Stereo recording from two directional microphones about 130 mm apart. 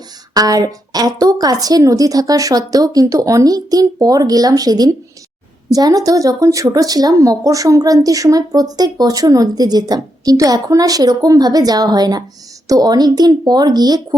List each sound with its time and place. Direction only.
0.3 s a woman's voice: 30° right (ahead or behind)